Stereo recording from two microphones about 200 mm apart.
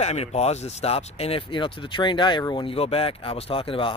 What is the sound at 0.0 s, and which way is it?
Speech, 30° left (ahead or behind).